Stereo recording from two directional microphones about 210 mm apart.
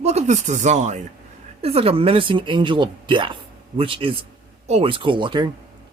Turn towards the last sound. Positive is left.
turn(degrees=-20)  # may be behind; listen again after turning